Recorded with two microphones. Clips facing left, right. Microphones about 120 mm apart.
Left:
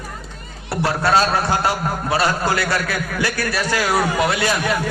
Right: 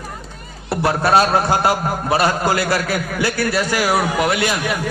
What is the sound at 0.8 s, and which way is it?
A man's voice, 20° right (ahead or behind).